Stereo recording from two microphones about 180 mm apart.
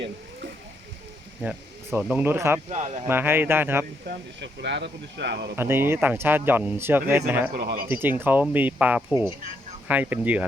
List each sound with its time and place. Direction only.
1.4 s speech: 5° right (ahead or behind)
2.6 s speech: 40° right (ahead or behind)
3.1 s speech: 10° right (ahead or behind)
4.0 s speech: 65° right (ahead or behind)
5.5 s speech: 10° right (ahead or behind)
7.5 s speech: 55° right (ahead or behind)
7.9 s speech: 10° right (ahead or behind)